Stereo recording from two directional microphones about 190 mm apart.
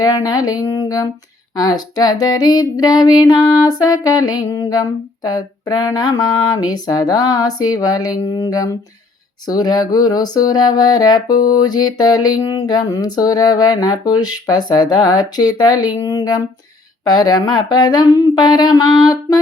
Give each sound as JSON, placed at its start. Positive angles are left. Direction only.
{"t": 0.0, "sound": "female singing", "side_deg": 20}
{"t": 17.0, "sound": "speech", "side_deg": 20}
{"t": 17.4, "sound": "female singing", "side_deg": 20}